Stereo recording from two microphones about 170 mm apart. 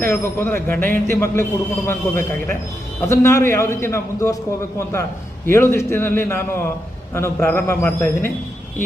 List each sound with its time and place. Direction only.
0.0 s a man's voice: 15° left (ahead or behind)